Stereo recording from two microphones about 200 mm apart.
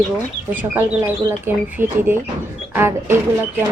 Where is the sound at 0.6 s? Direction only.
10° right (ahead or behind).